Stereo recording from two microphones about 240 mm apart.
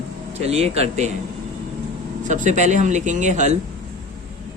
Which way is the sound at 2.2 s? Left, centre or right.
Right.